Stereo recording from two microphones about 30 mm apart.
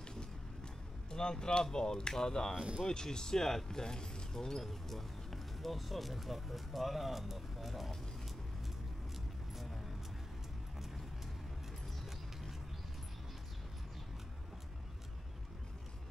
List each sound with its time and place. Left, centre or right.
1.1 s speech: left
2.5 s speech: right
2.9 s speech: left
4.6 s speech: centre